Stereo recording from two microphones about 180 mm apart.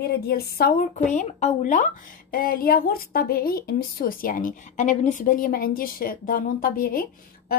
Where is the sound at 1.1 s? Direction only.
40° left (ahead or behind).